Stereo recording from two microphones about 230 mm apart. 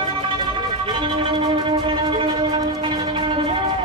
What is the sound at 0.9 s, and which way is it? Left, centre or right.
Music, right.